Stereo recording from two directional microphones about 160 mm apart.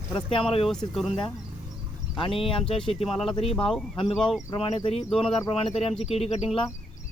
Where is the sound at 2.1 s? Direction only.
35° left (ahead or behind).